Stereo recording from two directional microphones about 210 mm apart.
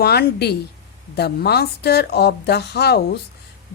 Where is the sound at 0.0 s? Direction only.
50° left (ahead or behind).